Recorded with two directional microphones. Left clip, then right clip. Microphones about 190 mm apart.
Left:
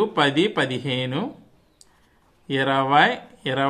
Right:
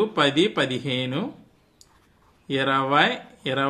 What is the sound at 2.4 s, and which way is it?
Speech, 25° left (ahead or behind).